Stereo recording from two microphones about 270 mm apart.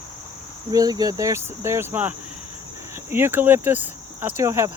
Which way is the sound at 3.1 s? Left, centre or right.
Centre.